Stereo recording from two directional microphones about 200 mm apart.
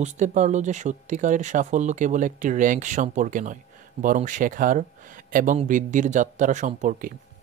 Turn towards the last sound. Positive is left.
turn(degrees=-40)  # may be behind; listen again after turning